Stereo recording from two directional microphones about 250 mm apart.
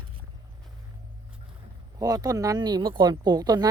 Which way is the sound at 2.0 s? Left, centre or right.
Centre.